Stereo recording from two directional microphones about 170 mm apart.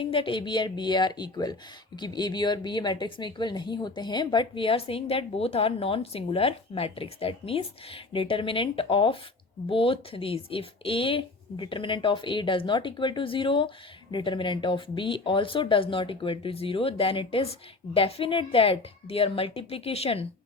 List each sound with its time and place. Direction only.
0.0 s speech: 30° left (ahead or behind)